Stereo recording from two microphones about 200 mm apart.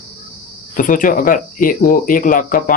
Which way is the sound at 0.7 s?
40° left (ahead or behind).